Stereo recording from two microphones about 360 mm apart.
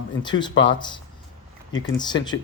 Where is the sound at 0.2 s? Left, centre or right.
Centre.